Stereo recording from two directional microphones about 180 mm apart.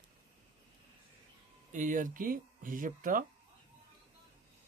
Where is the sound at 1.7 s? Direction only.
45° right (ahead or behind).